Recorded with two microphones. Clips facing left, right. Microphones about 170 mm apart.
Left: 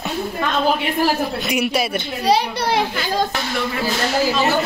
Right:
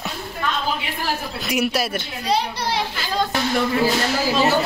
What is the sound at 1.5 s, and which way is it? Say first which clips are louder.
Speech: right 1 dB; centre (ahead or behind).